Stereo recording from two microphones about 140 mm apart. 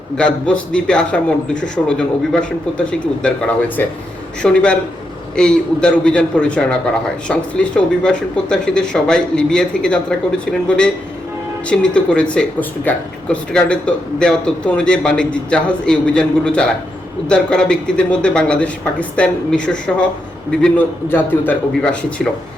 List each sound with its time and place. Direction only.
0.2 s speech: 10° left (ahead or behind)